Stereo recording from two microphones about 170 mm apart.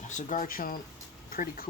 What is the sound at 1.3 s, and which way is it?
Speech, 60° left (ahead or behind).